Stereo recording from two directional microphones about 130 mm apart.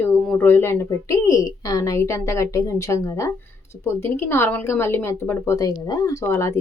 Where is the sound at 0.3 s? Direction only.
15° left (ahead or behind).